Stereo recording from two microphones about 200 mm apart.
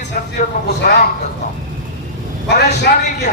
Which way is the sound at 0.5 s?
40° left (ahead or behind).